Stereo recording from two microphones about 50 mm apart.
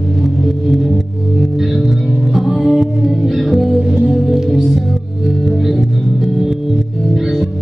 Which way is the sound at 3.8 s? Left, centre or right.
Centre.